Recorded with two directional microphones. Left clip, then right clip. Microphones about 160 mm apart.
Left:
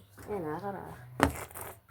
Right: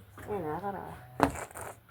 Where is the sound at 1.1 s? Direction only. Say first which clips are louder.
Even; 45° left (ahead or behind).